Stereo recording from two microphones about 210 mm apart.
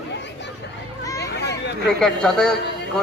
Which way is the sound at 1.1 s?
55° left (ahead or behind).